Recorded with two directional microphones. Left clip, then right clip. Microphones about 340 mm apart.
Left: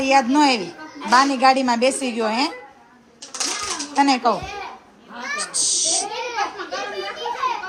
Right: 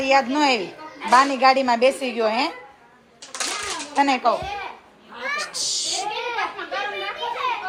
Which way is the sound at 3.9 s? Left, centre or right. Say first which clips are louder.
Left 1 dB; centre.